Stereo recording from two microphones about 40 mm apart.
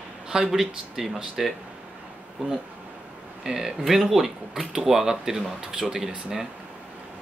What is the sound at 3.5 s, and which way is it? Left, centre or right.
Speech, centre.